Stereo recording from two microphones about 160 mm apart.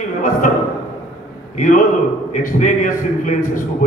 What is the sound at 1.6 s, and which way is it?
A man's voice, 55° left (ahead or behind).